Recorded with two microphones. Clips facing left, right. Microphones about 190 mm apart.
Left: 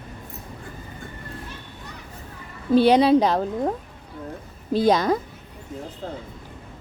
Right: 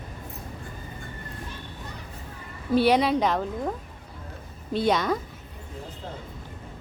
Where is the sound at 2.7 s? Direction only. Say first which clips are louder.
Left 5 dB; 30° left (ahead or behind).